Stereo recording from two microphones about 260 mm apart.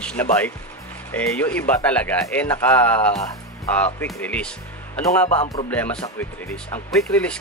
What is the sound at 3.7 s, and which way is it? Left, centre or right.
Speech, centre.